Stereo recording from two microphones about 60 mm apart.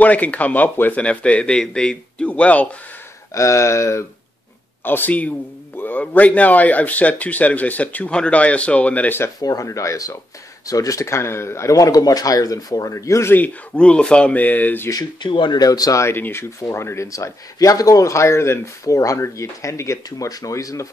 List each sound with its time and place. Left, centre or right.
0.0 s a man's voice: left
3.3 s speech: left
4.8 s a man's voice: left
9.4 s speech: left
13.7 s a man's voice: centre
15.6 s speech: left
16.2 s speech: left
16.4 s speech: left
18.9 s speech: left
19.2 s speech: left
20.1 s speech: left